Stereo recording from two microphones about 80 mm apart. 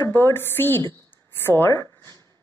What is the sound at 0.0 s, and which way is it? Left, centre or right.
A woman's voice, left.